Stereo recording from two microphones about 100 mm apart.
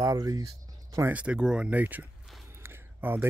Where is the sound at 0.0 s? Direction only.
40° right (ahead or behind).